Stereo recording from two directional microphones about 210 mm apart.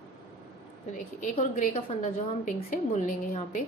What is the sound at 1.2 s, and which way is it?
A woman's voice, 35° left (ahead or behind).